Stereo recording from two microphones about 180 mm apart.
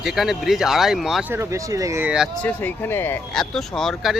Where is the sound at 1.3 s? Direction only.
15° right (ahead or behind).